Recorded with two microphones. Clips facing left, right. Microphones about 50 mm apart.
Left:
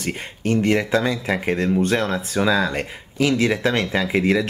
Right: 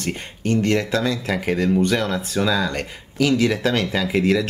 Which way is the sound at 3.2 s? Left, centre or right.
Left.